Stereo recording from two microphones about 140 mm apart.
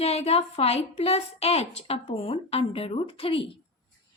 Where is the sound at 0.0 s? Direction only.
45° left (ahead or behind).